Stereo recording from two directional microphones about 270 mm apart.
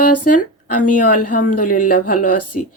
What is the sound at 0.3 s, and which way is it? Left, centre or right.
Speech, left.